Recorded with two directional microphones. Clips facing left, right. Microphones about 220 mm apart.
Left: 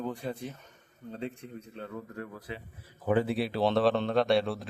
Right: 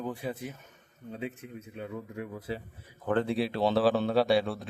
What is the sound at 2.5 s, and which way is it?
Speech, 35° right (ahead or behind).